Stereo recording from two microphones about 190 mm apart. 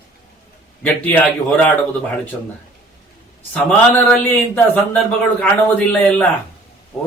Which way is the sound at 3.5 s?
5° left (ahead or behind).